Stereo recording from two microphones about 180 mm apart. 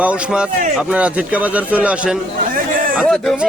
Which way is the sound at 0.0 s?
5° right (ahead or behind).